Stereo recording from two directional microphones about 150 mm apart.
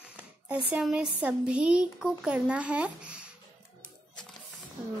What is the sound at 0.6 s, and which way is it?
Speech, centre (ahead or behind).